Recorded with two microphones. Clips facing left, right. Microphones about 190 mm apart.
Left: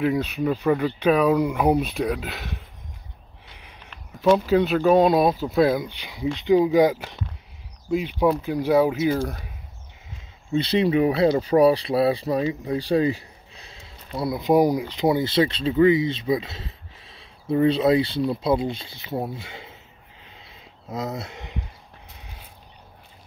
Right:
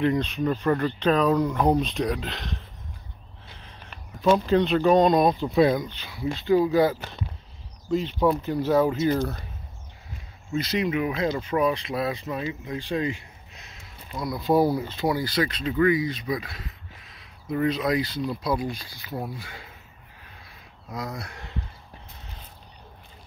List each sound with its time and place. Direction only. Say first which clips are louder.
0.0 s speech: left 1 dB; 5° left (ahead or behind)
4.2 s speech: left 2 dB; 5° left (ahead or behind)
10.5 s speech: left 5 dB; 30° left (ahead or behind)
20.2 s a sound: left 3 dB; 20° left (ahead or behind)